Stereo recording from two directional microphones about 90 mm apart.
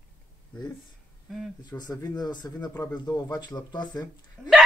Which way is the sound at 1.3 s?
5° right (ahead or behind).